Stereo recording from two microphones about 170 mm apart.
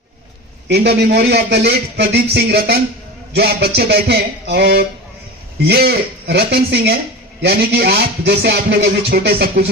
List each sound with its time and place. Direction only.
0.7 s speech: 75° right (ahead or behind)